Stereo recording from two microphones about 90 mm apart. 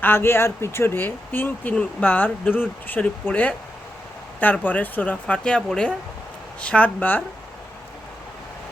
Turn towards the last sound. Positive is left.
turn(degrees=20)  # may be behind; listen again after turning